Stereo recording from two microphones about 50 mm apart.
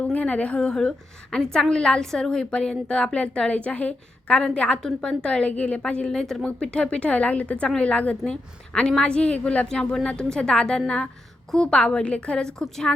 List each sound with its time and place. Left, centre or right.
0.0 s a woman's voice: left
9.6 s a woman's voice: centre
12.5 s a woman's voice: centre